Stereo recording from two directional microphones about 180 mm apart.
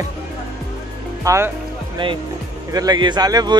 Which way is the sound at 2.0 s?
25° right (ahead or behind).